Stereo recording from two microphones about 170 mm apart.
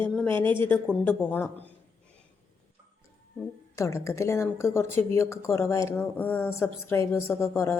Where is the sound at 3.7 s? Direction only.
15° left (ahead or behind).